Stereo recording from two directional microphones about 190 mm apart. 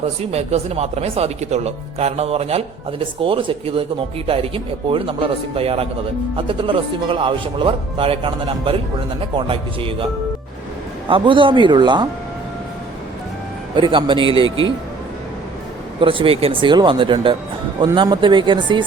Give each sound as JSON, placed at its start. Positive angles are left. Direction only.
{"t": 0.0, "sound": "speech", "side_deg": -35}
{"t": 11.1, "sound": "speech", "side_deg": -25}
{"t": 13.7, "sound": "speech", "side_deg": -25}
{"t": 16.0, "sound": "speech", "side_deg": -30}